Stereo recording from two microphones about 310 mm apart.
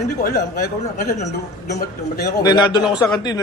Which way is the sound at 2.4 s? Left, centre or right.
Centre.